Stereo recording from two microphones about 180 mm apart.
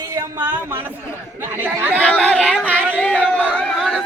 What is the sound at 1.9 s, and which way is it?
Speech, 5° left (ahead or behind).